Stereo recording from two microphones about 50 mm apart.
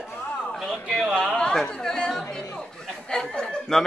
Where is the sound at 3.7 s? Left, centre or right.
Centre.